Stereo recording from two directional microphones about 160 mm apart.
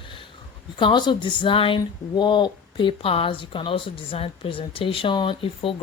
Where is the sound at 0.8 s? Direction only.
30° left (ahead or behind).